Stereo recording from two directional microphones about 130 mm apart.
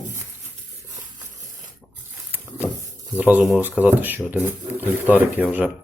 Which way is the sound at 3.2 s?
10° right (ahead or behind).